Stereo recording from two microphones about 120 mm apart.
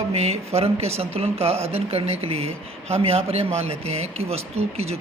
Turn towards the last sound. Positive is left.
turn(degrees=-60)  # may be behind; listen again after turning